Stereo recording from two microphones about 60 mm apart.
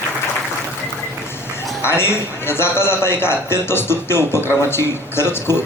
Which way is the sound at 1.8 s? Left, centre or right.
Left.